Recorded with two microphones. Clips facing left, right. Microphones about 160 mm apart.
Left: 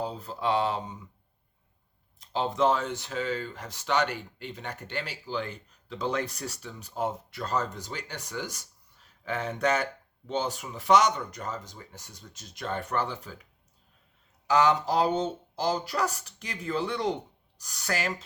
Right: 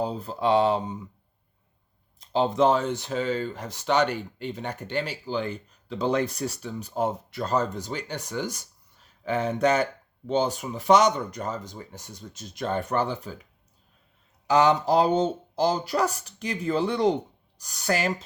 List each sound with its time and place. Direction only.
0.0 s speech: 25° right (ahead or behind)
2.3 s speech: 25° right (ahead or behind)
14.4 s speech: 20° right (ahead or behind)